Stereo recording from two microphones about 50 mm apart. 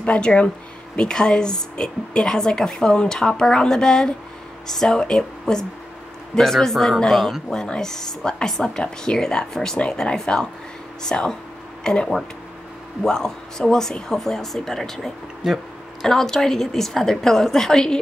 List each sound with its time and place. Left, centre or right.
0.0 s speech: left
15.4 s speech: centre
16.0 s speech: centre